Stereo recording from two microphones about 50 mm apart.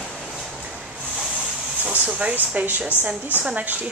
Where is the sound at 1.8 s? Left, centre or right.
Right.